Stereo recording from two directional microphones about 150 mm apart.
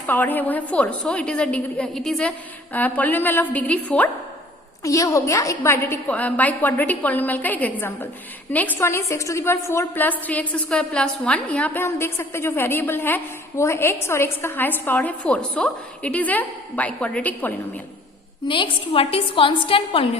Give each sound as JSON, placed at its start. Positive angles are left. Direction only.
{"t": 0.1, "sound": "a woman's voice", "side_deg": 10}
{"t": 4.8, "sound": "a woman's voice", "side_deg": 20}
{"t": 18.4, "sound": "a woman's voice", "side_deg": 35}